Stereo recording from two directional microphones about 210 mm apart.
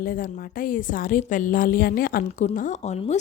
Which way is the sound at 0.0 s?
40° left (ahead or behind).